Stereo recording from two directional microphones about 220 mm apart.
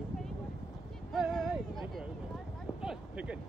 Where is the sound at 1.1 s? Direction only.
Centre (ahead or behind).